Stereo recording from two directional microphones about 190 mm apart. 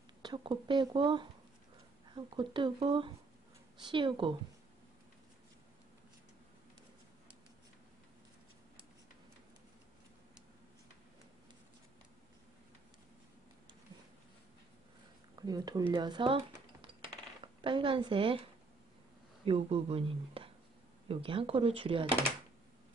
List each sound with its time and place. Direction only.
0.2 s speech: 25° right (ahead or behind)
15.3 s speech: 20° right (ahead or behind)
17.6 s speech: 25° right (ahead or behind)
19.4 s speech: 30° right (ahead or behind)